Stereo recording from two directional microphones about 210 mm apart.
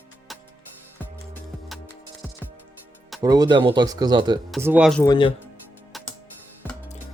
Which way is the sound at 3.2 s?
20° right (ahead or behind).